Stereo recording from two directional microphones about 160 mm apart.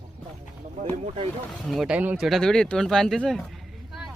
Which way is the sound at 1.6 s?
Centre (ahead or behind).